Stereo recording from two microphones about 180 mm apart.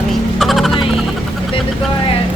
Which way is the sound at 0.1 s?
Centre (ahead or behind).